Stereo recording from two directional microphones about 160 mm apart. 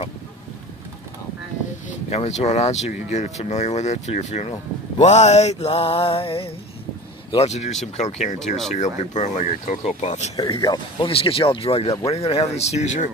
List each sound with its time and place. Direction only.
1.9 s speech: 45° left (ahead or behind)
10.6 s speech: 25° left (ahead or behind); by 13.1 s 45° left (ahead or behind)